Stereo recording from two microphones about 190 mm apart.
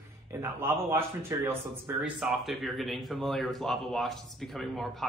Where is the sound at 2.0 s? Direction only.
Centre (ahead or behind).